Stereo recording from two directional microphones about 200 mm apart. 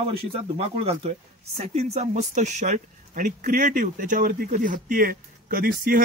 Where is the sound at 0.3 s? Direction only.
30° right (ahead or behind).